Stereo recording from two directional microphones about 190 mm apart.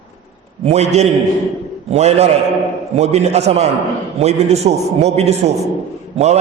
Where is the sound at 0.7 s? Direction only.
35° right (ahead or behind).